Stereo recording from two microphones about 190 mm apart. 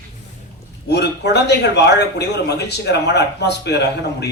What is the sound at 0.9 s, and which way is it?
Speech, 60° left (ahead or behind).